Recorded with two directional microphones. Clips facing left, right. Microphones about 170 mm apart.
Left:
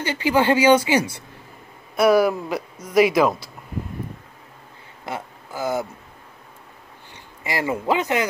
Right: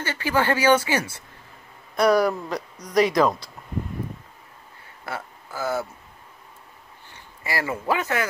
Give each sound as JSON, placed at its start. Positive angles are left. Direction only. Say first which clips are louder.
{"t": 0.0, "sound": "speech", "louder": "left 4 dB", "side_deg": 15}
{"t": 2.0, "sound": "speech", "louder": "left 3 dB", "side_deg": 5}
{"t": 5.0, "sound": "a sound", "louder": "left 2 dB", "side_deg": 15}
{"t": 7.4, "sound": "speech", "louder": "left 3 dB", "side_deg": 20}